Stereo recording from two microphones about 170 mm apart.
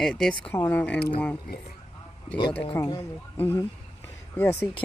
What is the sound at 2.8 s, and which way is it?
Speech, 15° left (ahead or behind).